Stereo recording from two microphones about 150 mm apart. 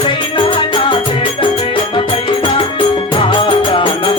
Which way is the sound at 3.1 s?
35° left (ahead or behind).